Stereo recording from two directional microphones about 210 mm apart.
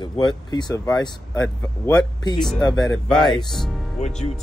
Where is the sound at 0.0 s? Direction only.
20° left (ahead or behind).